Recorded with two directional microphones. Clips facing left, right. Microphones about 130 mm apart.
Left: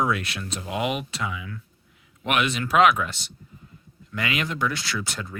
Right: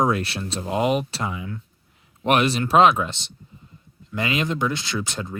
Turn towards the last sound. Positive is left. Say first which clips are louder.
# right 3 dB
turn(degrees=-20)  # may be behind; listen again after turning